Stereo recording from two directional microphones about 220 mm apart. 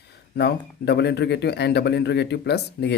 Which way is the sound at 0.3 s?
50° left (ahead or behind).